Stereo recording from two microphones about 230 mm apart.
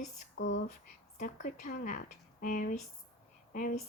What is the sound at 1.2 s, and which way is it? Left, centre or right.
Speech, left.